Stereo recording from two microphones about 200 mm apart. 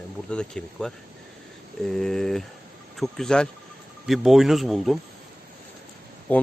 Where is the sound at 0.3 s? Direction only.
5° left (ahead or behind).